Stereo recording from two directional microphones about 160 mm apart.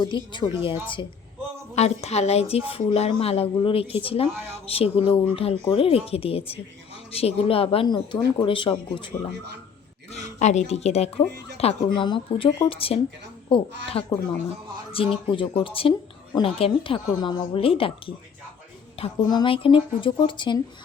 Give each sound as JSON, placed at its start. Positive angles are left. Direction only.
{"t": 0.0, "sound": "speech", "side_deg": 30}
{"t": 1.7, "sound": "a woman's voice", "side_deg": 40}
{"t": 9.1, "sound": "speech", "side_deg": 20}
{"t": 10.1, "sound": "a woman's voice", "side_deg": 45}